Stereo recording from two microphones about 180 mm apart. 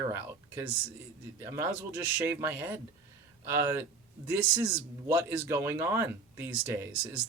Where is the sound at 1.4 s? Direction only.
15° right (ahead or behind).